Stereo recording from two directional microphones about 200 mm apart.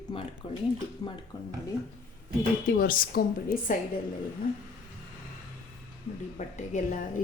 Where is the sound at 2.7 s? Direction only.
45° left (ahead or behind).